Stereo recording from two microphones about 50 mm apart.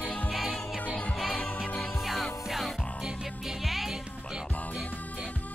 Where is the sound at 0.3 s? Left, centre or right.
Centre.